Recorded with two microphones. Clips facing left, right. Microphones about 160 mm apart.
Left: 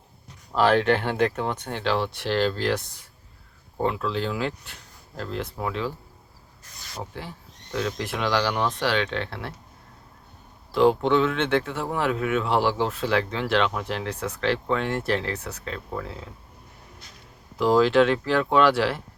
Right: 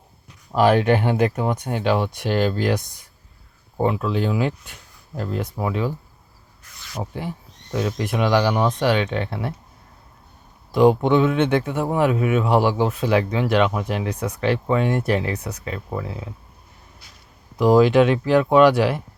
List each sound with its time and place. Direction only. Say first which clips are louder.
0.5 s speech: right 3 dB; 10° right (ahead or behind)
7.2 s speech: right 7 dB; 20° right (ahead or behind)
10.7 s speech: right 4 dB; 15° right (ahead or behind)
17.6 s speech: right 4 dB; 15° right (ahead or behind)